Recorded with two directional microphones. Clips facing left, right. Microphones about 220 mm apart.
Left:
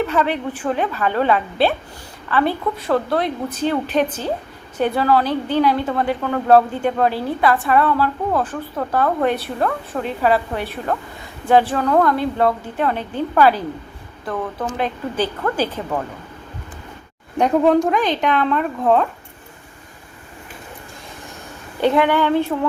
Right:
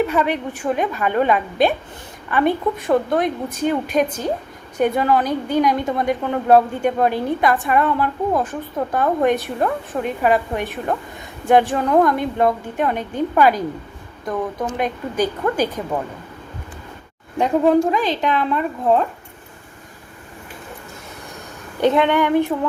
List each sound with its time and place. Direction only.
0.1 s a woman's voice: 10° right (ahead or behind)
14.8 s a woman's voice: 15° right (ahead or behind)
17.3 s a woman's voice: 5° right (ahead or behind)
21.8 s speech: 20° right (ahead or behind)